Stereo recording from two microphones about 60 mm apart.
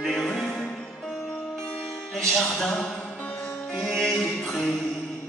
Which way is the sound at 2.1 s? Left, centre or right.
Centre.